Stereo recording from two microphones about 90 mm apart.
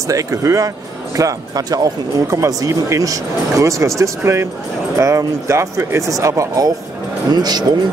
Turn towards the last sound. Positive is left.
turn(degrees=-50)  # may be behind; listen again after turning